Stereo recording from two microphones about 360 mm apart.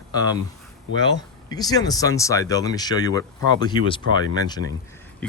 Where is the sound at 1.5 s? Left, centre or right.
Centre.